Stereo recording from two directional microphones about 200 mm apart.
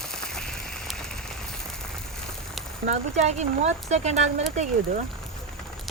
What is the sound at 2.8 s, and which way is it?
Speech, 35° right (ahead or behind).